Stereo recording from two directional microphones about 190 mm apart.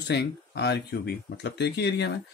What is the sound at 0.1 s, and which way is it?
Speech, 60° left (ahead or behind).